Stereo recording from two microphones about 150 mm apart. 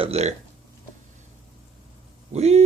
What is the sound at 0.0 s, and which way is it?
Speech, 45° right (ahead or behind).